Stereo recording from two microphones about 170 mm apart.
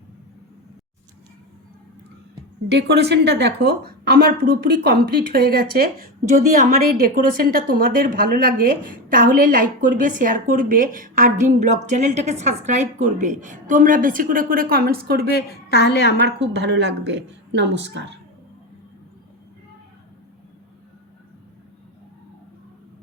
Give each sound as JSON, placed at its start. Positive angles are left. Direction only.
{"t": 2.7, "sound": "a woman's voice", "side_deg": -75}
{"t": 15.3, "sound": "a woman's voice", "side_deg": 70}
{"t": 16.2, "sound": "a woman's voice", "side_deg": -85}